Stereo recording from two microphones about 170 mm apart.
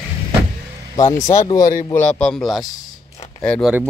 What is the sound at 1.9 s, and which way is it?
A man's voice, 10° left (ahead or behind).